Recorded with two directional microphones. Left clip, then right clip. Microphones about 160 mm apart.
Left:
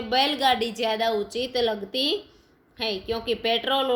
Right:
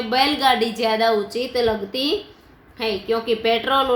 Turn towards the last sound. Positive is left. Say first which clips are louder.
# right 5 dB
turn(degrees=45)  # may be behind; listen again after turning